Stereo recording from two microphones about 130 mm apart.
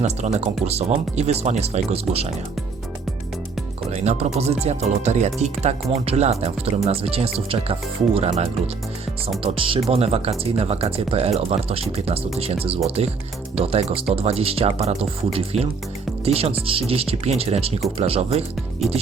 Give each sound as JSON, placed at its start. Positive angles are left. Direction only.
{"t": 0.3, "sound": "speech", "side_deg": -55}
{"t": 3.9, "sound": "speech", "side_deg": -60}
{"t": 9.4, "sound": "speech", "side_deg": -45}